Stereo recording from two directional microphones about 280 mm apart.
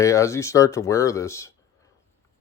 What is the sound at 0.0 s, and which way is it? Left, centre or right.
Speech, centre.